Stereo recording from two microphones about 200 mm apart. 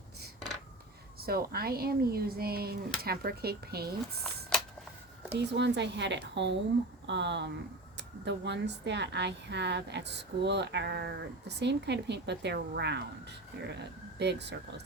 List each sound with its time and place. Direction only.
1.2 s speech: 50° right (ahead or behind)
4.2 s a sound: 5° left (ahead or behind)
5.3 s speech: 60° right (ahead or behind)